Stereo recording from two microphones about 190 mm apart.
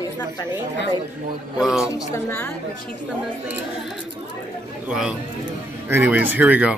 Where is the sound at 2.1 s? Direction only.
10° left (ahead or behind).